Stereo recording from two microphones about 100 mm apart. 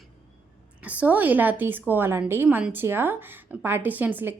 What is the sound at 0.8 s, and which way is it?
A woman's voice, 15° right (ahead or behind).